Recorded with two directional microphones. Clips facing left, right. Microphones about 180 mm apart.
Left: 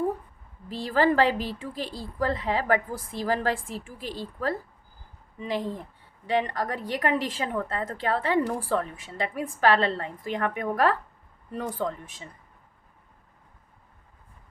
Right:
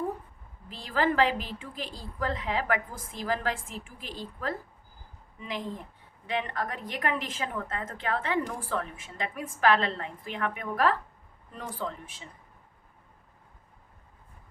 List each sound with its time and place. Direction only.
0.7 s a woman's voice: 35° left (ahead or behind)